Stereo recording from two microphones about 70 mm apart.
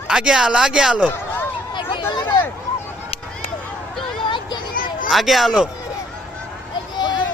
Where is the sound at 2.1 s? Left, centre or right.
Left.